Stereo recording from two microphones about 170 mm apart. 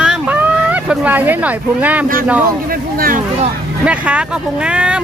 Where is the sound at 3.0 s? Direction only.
55° right (ahead or behind).